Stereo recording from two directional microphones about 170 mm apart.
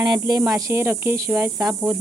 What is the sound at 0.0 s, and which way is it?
Speech, 25° right (ahead or behind).